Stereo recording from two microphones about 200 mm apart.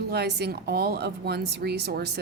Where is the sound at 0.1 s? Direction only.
55° right (ahead or behind).